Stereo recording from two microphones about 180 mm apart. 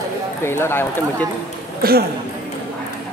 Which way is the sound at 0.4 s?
15° left (ahead or behind).